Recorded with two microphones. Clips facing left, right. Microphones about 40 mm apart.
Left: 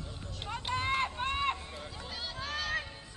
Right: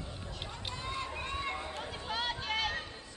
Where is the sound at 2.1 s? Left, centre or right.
Right.